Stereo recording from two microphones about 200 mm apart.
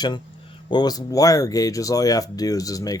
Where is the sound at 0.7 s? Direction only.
20° left (ahead or behind).